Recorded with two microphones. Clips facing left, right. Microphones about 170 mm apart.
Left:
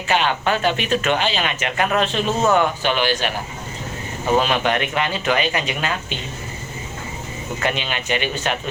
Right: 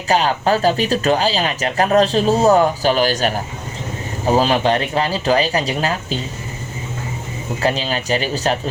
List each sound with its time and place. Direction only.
0.1 s speech: 35° right (ahead or behind)
7.6 s speech: 35° right (ahead or behind)